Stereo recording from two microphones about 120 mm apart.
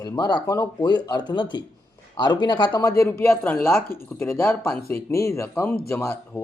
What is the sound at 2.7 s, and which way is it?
Speech, 25° left (ahead or behind).